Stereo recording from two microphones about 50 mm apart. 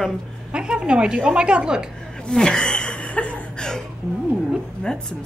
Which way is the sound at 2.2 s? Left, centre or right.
Centre.